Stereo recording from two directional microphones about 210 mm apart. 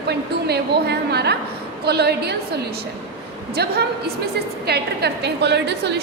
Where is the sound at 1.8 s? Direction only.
50° right (ahead or behind).